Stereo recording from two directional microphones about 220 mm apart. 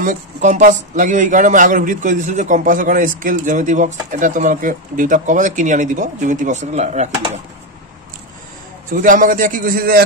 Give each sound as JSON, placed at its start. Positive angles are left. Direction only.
{"t": 0.0, "sound": "speech", "side_deg": -35}
{"t": 8.9, "sound": "speech", "side_deg": -35}